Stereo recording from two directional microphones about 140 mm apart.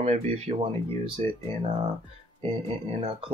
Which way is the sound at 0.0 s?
50° right (ahead or behind).